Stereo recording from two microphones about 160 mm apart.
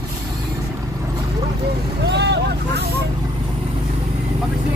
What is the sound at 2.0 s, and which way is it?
Vehicle, 90° right.